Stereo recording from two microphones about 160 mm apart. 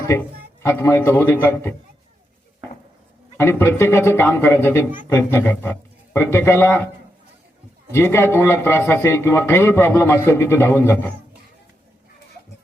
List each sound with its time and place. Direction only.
0.1 s a man's voice: 15° left (ahead or behind)
3.3 s a man's voice: 15° left (ahead or behind)
7.9 s a man's voice: 15° left (ahead or behind)